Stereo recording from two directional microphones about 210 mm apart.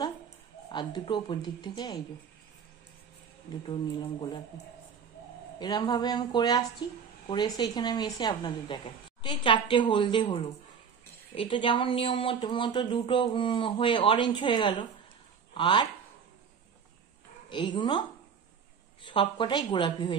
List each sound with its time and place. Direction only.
0.7 s speech: 20° left (ahead or behind)
3.6 s speech: 20° left (ahead or behind)
5.6 s speech: 20° left (ahead or behind)
17.5 s speech: 20° left (ahead or behind)
19.0 s speech: 25° left (ahead or behind)